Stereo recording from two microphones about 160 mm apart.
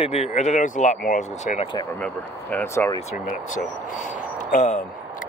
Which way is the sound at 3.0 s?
50° left (ahead or behind).